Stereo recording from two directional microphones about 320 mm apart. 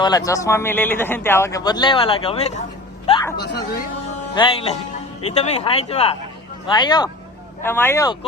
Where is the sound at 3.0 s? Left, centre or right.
Centre.